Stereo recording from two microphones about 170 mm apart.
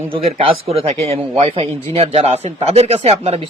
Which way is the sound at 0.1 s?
35° right (ahead or behind).